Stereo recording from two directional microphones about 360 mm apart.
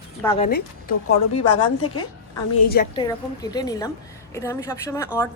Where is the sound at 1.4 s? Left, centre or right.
Left.